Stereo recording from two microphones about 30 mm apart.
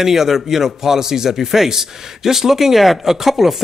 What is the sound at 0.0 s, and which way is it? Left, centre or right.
A man's voice, centre.